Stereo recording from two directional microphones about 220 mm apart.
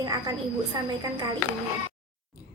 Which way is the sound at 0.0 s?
15° right (ahead or behind).